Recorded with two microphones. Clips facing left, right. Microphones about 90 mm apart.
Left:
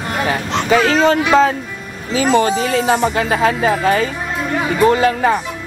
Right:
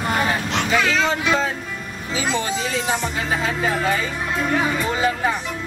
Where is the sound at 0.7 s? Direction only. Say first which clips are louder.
Left 8 dB; 45° left (ahead or behind).